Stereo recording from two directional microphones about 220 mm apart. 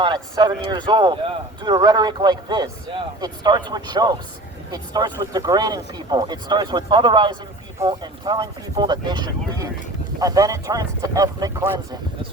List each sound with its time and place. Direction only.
0.0 s speech: 20° right (ahead or behind)